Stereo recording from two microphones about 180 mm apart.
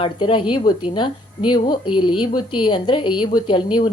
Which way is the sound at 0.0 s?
30° left (ahead or behind).